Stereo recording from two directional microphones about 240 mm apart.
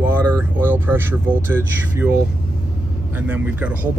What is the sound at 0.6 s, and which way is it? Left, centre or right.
Speech, centre.